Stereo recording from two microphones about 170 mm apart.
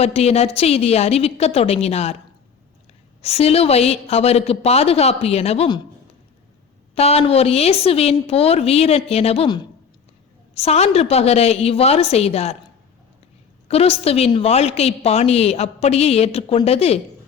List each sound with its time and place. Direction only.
0.0 s a woman's voice: 40° left (ahead or behind)
3.2 s a woman's voice: 35° left (ahead or behind)
6.9 s a woman's voice: 35° left (ahead or behind)
13.7 s a woman's voice: 35° left (ahead or behind)